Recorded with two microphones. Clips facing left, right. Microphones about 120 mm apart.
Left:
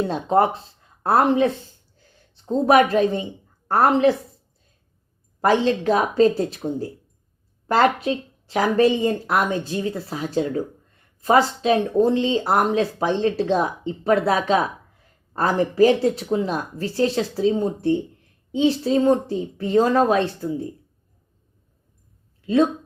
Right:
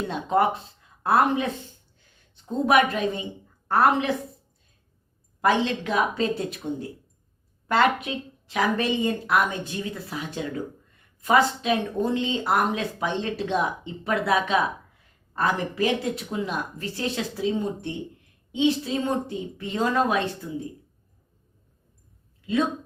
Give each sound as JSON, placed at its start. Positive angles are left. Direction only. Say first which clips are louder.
{"t": 0.1, "sound": "a woman's voice", "louder": "even", "side_deg": 35}
{"t": 5.4, "sound": "speech", "louder": "left 4 dB", "side_deg": 35}